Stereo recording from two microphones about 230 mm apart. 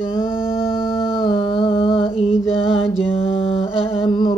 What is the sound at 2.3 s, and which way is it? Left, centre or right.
Mantra, centre.